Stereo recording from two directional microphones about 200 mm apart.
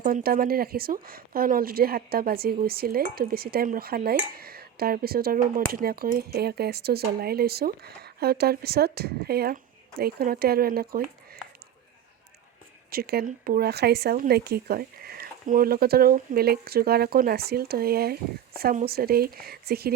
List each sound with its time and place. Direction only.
0.0 s speech: 45° right (ahead or behind)
12.9 s speech: 50° right (ahead or behind)